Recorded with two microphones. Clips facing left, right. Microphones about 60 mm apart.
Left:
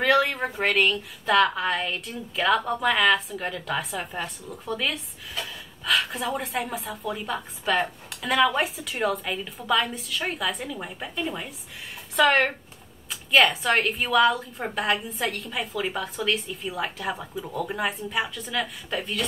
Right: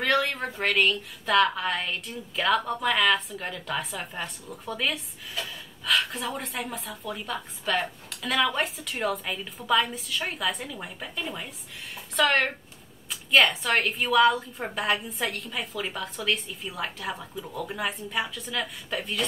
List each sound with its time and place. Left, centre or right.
0.0 s a woman's voice: centre